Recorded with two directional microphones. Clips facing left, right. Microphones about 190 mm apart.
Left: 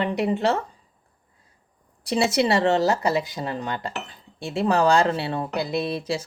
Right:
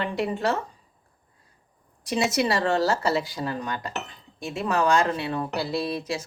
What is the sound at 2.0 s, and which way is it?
Speech, 30° left (ahead or behind).